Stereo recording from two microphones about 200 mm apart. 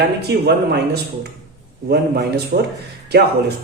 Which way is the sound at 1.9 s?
55° right (ahead or behind).